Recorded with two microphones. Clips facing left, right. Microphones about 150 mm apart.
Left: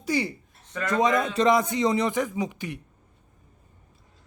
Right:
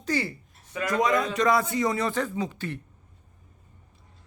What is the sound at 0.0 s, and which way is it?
A man's voice, 15° left (ahead or behind).